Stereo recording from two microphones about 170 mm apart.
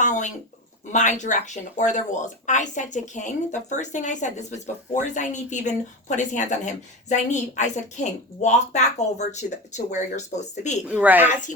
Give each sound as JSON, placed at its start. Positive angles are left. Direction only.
{"t": 0.0, "sound": "a sound", "side_deg": 45}
{"t": 0.9, "sound": "speech", "side_deg": 45}
{"t": 10.8, "sound": "speech", "side_deg": -10}
{"t": 11.3, "sound": "speech", "side_deg": 45}